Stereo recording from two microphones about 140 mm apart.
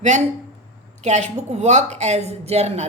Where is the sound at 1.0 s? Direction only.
55° right (ahead or behind).